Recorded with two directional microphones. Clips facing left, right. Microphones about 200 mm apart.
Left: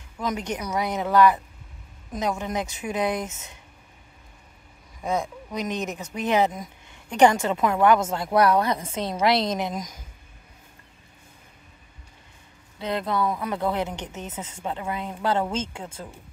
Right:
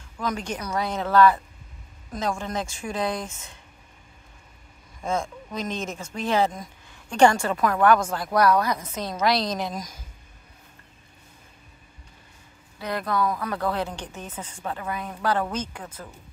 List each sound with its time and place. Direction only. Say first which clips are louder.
0.2 s a woman's voice: left 1 dB; 20° left (ahead or behind)
5.0 s a woman's voice: left 1 dB; 15° left (ahead or behind)
12.7 s a woman's voice: left 1 dB; 25° left (ahead or behind)